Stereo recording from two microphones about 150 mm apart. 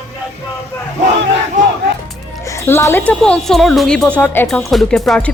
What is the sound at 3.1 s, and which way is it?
Speech, 5° left (ahead or behind).